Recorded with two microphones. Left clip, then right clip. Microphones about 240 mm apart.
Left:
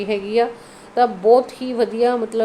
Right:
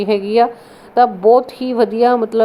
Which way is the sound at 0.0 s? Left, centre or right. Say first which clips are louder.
Right 5 dB; right.